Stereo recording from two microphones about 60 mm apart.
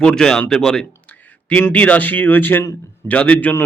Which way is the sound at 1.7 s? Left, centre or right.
Left.